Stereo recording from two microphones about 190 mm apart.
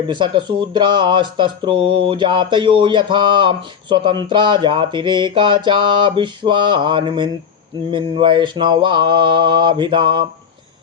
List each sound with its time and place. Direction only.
0.1 s speech: 25° right (ahead or behind)